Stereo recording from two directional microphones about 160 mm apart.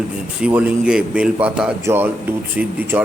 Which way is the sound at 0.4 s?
10° right (ahead or behind).